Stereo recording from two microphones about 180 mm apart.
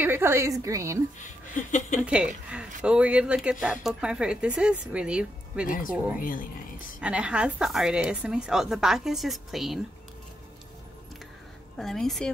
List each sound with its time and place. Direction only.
0.0 s a woman's voice: 10° right (ahead or behind)
1.2 s speech: 45° left (ahead or behind)
2.0 s a woman's voice: 5° right (ahead or behind)
6.1 s speech: 50° left (ahead or behind)
7.0 s a woman's voice: 5° right (ahead or behind)
11.8 s a woman's voice: centre (ahead or behind)